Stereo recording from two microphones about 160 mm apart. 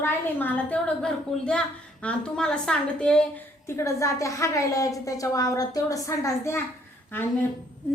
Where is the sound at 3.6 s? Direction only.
15° left (ahead or behind).